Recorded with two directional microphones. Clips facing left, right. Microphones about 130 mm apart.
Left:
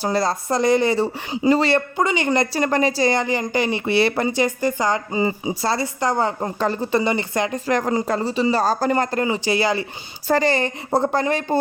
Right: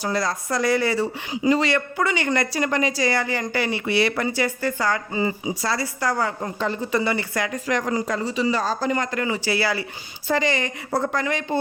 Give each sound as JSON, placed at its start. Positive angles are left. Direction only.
{"t": 0.0, "sound": "speech", "side_deg": 30}
{"t": 2.6, "sound": "speech", "side_deg": 35}
{"t": 6.6, "sound": "speech", "side_deg": 40}
{"t": 7.0, "sound": "speech", "side_deg": 20}
{"t": 9.2, "sound": "speech", "side_deg": 20}
{"t": 10.2, "sound": "speech", "side_deg": 40}